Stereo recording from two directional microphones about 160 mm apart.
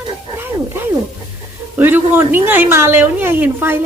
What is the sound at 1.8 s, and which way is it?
A woman's voice, 15° right (ahead or behind).